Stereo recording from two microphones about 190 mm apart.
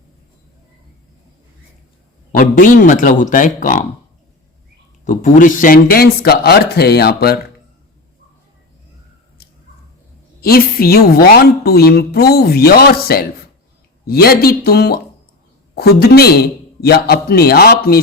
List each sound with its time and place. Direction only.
2.3 s a man's voice: 45° left (ahead or behind)
5.0 s a man's voice: 40° left (ahead or behind)
10.4 s a woman's voice: 55° left (ahead or behind)